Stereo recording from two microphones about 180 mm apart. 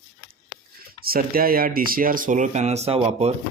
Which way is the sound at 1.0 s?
55° right (ahead or behind).